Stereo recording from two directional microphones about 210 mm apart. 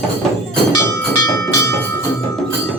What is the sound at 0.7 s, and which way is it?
Music, 15° left (ahead or behind).